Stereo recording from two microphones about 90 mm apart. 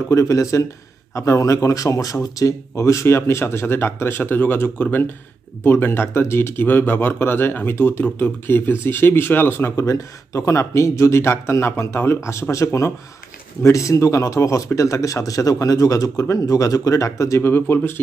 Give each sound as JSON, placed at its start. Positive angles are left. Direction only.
{"t": 0.1, "sound": "speech", "side_deg": 35}